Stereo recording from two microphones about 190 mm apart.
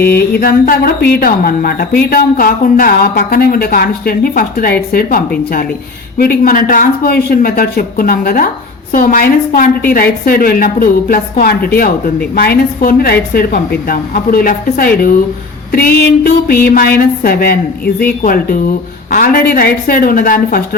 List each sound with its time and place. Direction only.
0.0 s a woman's voice: 55° left (ahead or behind)